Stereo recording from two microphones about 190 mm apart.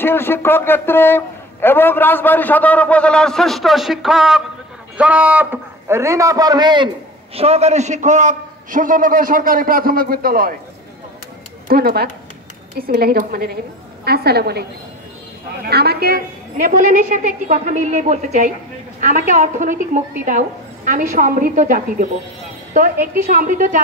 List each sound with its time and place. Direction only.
0.0 s a man's voice: 10° left (ahead or behind); by 6.9 s 25° right (ahead or behind)
7.3 s a man's voice: 35° right (ahead or behind); by 10.5 s 50° right (ahead or behind)
11.6 s a man's voice: 55° right (ahead or behind)
16.6 s a woman's voice: 40° right (ahead or behind)
23.3 s a man's voice: 45° right (ahead or behind)